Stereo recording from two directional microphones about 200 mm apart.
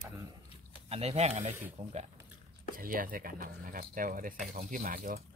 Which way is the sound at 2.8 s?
45° right (ahead or behind).